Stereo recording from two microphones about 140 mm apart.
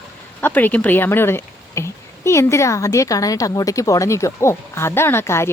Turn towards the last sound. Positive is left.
turn(degrees=20)  # may be behind; listen again after turning